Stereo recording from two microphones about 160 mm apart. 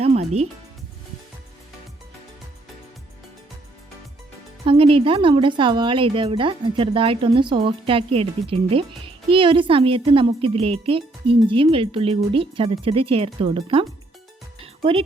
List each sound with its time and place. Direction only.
0.0 s music: 40° right (ahead or behind)
4.6 s speech: 35° right (ahead or behind)